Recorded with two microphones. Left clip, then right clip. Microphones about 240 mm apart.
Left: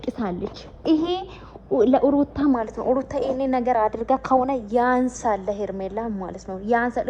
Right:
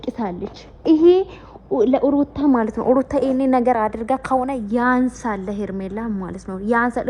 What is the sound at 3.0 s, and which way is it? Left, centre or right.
Speech, centre.